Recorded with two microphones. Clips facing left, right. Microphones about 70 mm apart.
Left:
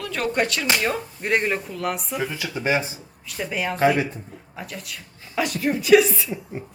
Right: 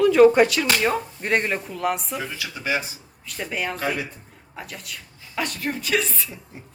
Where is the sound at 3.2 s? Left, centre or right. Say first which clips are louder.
Left 1 dB; centre.